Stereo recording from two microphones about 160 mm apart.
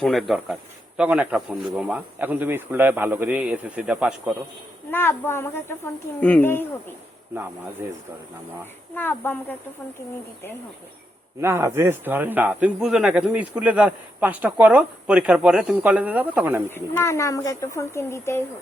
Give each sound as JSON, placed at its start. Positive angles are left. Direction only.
{"t": 0.0, "sound": "speech", "side_deg": 0}
{"t": 4.9, "sound": "speech", "side_deg": 15}
{"t": 9.0, "sound": "speech", "side_deg": 10}
{"t": 11.3, "sound": "speech", "side_deg": -15}
{"t": 16.6, "sound": "speech", "side_deg": 15}